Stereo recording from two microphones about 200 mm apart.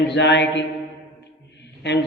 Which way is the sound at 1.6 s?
60° left (ahead or behind).